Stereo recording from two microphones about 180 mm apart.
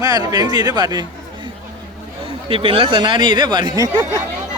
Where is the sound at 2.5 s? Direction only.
30° right (ahead or behind).